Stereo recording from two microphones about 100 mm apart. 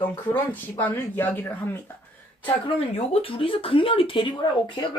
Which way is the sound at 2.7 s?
85° left.